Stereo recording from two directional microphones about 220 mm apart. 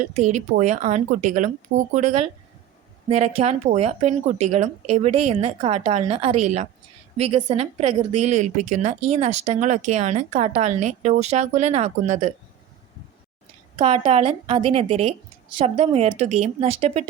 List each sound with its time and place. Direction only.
0.0 s speech: 30° right (ahead or behind)
13.7 s speech: 25° right (ahead or behind)